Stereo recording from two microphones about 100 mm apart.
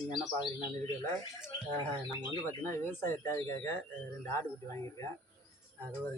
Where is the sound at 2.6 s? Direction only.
25° left (ahead or behind).